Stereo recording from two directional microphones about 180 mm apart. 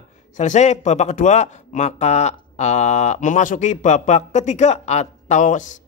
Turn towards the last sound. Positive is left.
turn(degrees=45)  # may be behind; listen again after turning